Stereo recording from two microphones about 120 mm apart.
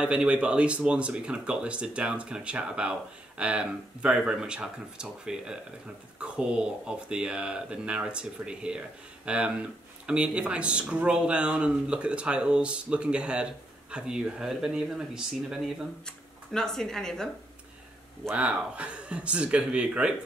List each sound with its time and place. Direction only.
0.0 s speech: 10° right (ahead or behind)
18.3 s speech: 10° right (ahead or behind)